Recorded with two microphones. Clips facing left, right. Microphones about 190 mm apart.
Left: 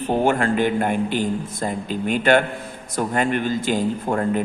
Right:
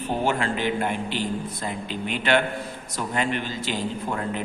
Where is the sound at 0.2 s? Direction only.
50° left (ahead or behind).